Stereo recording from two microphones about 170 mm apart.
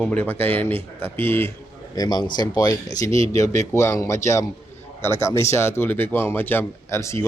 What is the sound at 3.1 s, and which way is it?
Speech, 35° right (ahead or behind).